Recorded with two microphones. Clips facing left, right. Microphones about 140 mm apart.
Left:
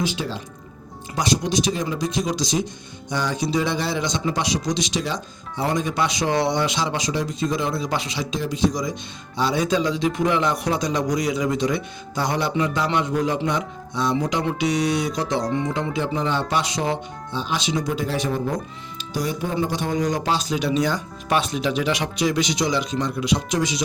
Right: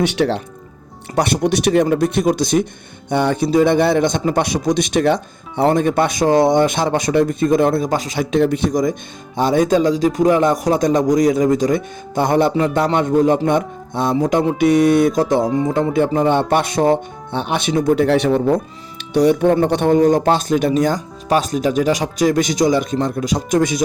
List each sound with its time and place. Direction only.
0.0 s a man's voice: 70° right (ahead or behind); by 23.8 s 50° right (ahead or behind)